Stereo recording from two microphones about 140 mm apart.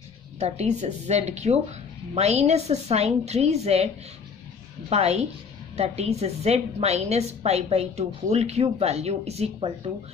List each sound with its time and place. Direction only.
0.4 s a woman's voice: 55° right (ahead or behind)